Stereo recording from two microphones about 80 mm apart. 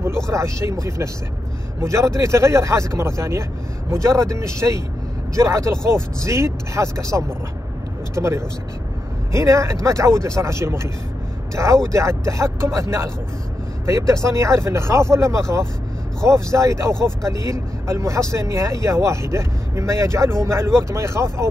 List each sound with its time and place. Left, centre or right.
0.0 s speech: right